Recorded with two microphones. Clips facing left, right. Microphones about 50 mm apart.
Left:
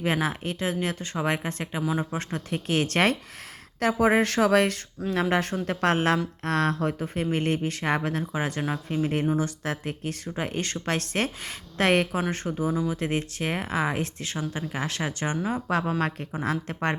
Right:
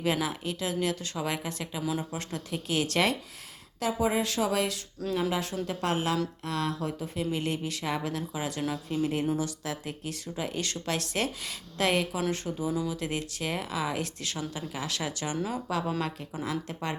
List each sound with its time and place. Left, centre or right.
0.0 s speech: left
3.8 s speech: left